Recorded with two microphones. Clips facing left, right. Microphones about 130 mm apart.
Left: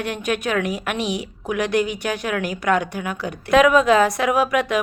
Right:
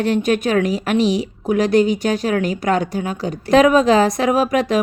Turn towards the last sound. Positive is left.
turn(degrees=-35)  # may be behind; listen again after turning